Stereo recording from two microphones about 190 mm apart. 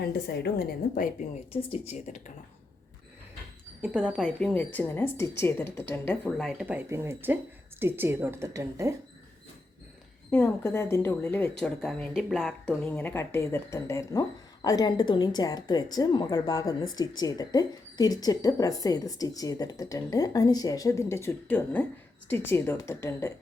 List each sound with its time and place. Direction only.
0.0 s a woman's voice: 55° left (ahead or behind)
1.7 s speech: 35° left (ahead or behind)
3.8 s a woman's voice: 5° right (ahead or behind)
10.3 s a woman's voice: 10° left (ahead or behind)
12.6 s a woman's voice: 10° left (ahead or behind)